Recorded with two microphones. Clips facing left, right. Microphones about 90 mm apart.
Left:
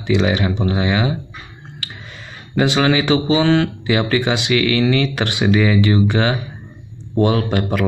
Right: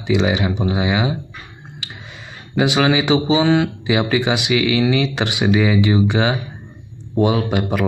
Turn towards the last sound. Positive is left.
turn(degrees=-10)  # may be behind; listen again after turning